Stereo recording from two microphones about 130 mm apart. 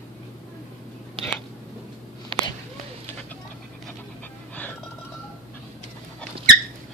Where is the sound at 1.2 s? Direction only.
40° right (ahead or behind).